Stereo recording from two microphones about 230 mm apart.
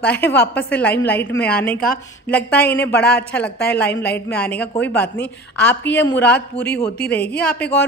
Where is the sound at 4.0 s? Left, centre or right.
Left.